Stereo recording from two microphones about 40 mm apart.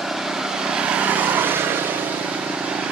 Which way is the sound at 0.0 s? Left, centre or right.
Centre.